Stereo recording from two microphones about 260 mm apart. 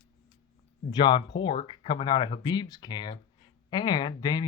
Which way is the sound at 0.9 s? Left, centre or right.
Centre.